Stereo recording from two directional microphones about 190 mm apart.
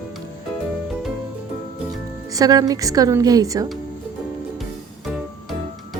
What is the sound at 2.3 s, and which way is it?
A woman's voice, 20° right (ahead or behind).